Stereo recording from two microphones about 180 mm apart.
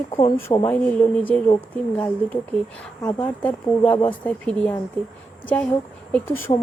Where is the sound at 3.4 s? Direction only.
10° left (ahead or behind).